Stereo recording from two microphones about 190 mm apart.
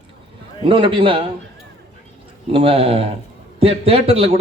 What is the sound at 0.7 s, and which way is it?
Speech, 25° right (ahead or behind).